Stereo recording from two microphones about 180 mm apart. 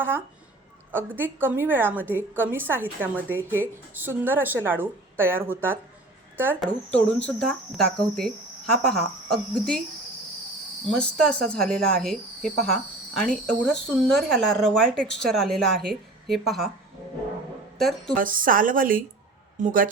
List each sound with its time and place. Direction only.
0.9 s a woman's voice: 10° right (ahead or behind)
7.1 s speech: 5° left (ahead or behind)
10.9 s speech: 5° left (ahead or behind)
17.7 s speech: centre (ahead or behind)
18.2 s a woman's voice: 50° right (ahead or behind)